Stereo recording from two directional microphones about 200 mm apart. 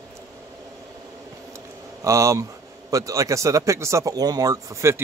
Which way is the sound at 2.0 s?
15° right (ahead or behind).